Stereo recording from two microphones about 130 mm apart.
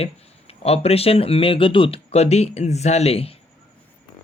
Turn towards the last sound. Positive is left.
turn(degrees=50)  # may be behind; listen again after turning